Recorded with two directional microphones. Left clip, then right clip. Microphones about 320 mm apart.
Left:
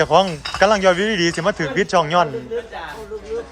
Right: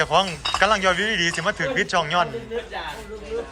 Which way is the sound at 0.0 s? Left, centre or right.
Left.